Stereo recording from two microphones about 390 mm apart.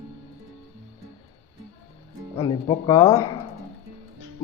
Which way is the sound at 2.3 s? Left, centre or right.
Centre.